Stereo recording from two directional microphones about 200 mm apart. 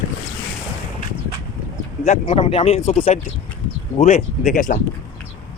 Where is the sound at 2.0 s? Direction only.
35° left (ahead or behind).